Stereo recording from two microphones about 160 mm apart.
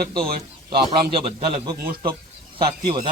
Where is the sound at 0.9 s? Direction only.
30° right (ahead or behind).